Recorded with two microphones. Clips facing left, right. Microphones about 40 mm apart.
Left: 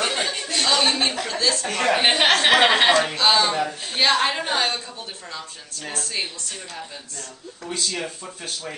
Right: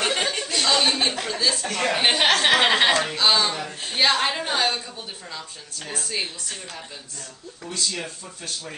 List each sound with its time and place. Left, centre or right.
0.0 s chuckle: centre
1.2 s a woman's voice: centre
1.7 s a woman's voice: centre
5.9 s a woman's voice: centre
7.6 s a woman's voice: centre